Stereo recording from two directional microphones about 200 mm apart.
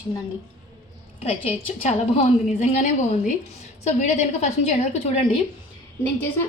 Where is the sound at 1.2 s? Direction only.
30° left (ahead or behind).